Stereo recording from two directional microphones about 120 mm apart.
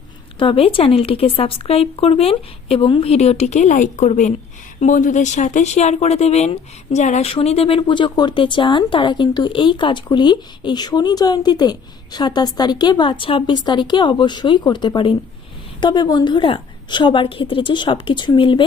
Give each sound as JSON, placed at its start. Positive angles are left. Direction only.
{"t": 0.3, "sound": "speech", "side_deg": 50}
{"t": 4.8, "sound": "speech", "side_deg": 90}
{"t": 7.3, "sound": "speech", "side_deg": 55}